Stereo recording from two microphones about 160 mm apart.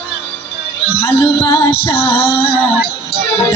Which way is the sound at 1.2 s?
35° left (ahead or behind).